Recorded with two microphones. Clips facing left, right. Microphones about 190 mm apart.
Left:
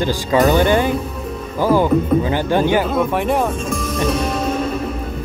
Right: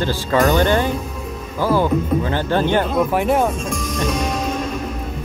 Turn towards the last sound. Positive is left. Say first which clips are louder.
# left 2 dB
turn(degrees=5)  # may be behind; listen again after turning